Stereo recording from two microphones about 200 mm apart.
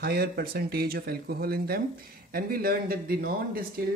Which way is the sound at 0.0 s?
50° right (ahead or behind).